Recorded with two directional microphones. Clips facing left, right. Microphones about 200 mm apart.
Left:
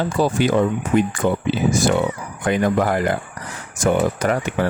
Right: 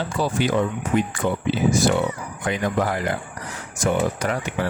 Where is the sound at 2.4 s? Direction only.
55° left (ahead or behind).